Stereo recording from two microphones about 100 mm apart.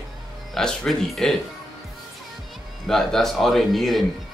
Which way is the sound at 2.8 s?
5° left (ahead or behind).